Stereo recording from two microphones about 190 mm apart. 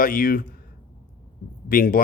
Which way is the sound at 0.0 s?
50° left (ahead or behind).